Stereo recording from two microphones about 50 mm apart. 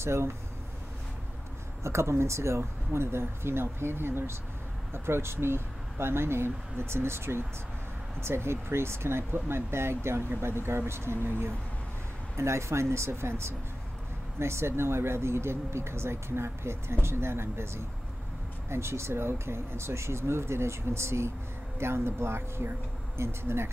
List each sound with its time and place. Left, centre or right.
0.0 s speech: right
1.8 s speech: right
12.4 s speech: right